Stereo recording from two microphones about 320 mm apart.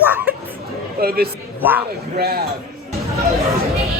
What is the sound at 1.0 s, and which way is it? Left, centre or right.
Speech, right.